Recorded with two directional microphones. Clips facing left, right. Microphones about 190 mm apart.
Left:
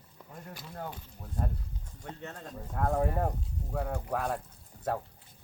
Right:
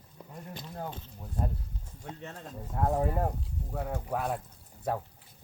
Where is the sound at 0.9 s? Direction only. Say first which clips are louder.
Right 1 dB; 20° right (ahead or behind).